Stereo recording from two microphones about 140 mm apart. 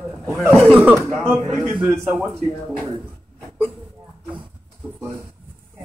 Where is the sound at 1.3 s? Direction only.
Centre (ahead or behind).